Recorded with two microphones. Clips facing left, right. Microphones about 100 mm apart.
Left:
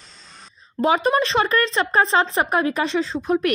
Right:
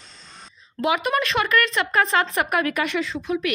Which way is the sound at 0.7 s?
35° left (ahead or behind).